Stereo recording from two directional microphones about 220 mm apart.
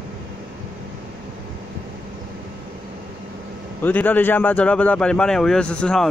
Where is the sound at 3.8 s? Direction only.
10° left (ahead or behind).